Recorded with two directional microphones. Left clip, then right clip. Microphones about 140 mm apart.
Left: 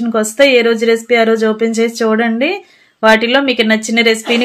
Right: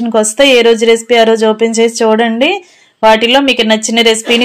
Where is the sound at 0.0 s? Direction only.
20° right (ahead or behind).